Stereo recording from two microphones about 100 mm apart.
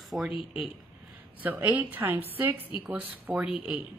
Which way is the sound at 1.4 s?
15° right (ahead or behind).